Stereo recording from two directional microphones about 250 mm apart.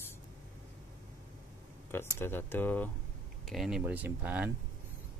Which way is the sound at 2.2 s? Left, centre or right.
Centre.